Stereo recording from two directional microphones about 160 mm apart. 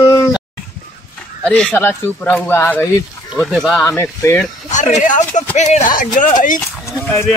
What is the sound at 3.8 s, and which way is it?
Speech, 15° left (ahead or behind).